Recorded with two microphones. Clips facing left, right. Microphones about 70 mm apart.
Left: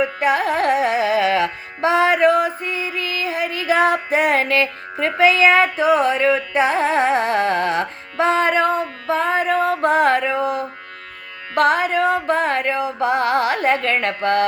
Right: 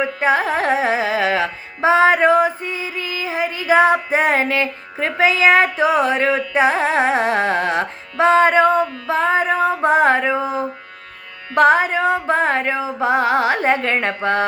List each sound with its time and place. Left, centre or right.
0.0 s music: right
5.3 s carnatic music: centre
11.5 s music: right